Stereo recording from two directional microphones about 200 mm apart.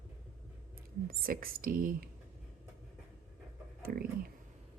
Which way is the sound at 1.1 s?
45° right (ahead or behind).